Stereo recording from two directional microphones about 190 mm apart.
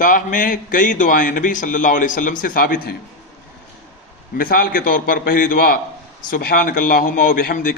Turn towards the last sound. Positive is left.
turn(degrees=50)  # may be behind; listen again after turning